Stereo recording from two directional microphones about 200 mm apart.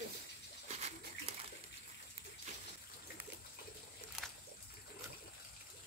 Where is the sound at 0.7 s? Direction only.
35° right (ahead or behind).